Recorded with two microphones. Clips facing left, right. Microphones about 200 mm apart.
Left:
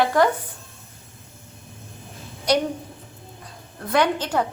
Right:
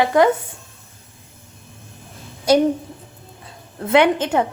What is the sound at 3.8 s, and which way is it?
Speech, 25° right (ahead or behind).